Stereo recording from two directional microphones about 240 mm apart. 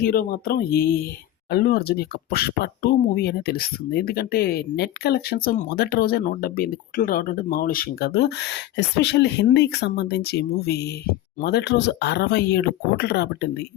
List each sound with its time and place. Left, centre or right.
0.0 s speech: left